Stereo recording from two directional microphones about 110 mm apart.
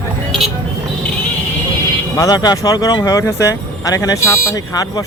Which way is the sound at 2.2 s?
35° left (ahead or behind).